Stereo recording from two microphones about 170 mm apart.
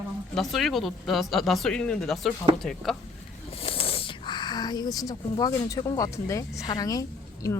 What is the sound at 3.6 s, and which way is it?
A woman's voice, 35° left (ahead or behind).